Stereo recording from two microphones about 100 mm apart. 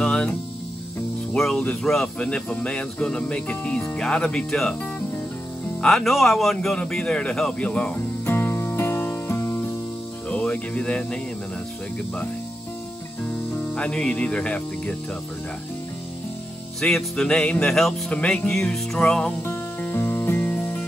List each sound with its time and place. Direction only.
0.0 s music: 5° left (ahead or behind)
1.3 s speech: 5° left (ahead or behind)
5.8 s speech: 5° left (ahead or behind)
8.3 s music: 25° left (ahead or behind)
10.3 s speech: 10° left (ahead or behind)
13.2 s speech: 10° left (ahead or behind)
16.8 s speech: 5° left (ahead or behind)
19.4 s music: 20° left (ahead or behind)